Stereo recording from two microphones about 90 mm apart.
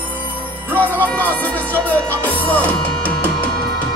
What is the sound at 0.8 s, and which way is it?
Music, 20° left (ahead or behind).